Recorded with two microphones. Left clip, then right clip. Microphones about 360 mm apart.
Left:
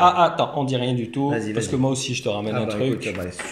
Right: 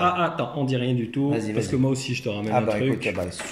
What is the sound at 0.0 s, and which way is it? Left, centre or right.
Speech, centre.